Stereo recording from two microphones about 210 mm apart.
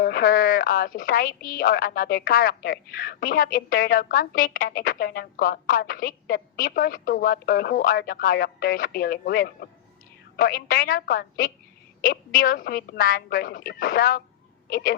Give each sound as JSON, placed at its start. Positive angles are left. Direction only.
{"t": 0.0, "sound": "a woman's voice", "side_deg": 45}